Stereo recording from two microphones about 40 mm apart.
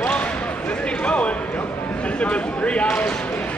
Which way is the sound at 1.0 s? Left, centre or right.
Left.